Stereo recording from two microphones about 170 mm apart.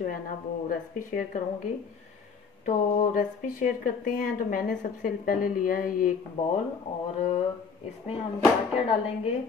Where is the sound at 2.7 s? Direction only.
50° left (ahead or behind).